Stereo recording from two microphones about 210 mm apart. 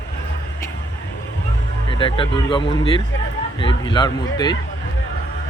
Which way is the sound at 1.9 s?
25° left (ahead or behind).